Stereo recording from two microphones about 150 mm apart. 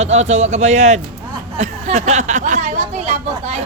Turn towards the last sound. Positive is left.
turn(degrees=-45)  # may be behind; listen again after turning